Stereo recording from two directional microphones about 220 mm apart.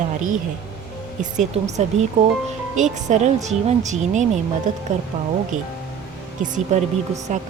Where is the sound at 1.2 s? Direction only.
30° right (ahead or behind).